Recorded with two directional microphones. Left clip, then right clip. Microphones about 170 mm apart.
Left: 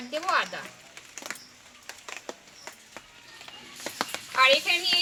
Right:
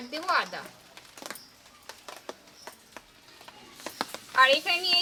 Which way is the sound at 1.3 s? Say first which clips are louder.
Left 3 dB; 30° right (ahead or behind).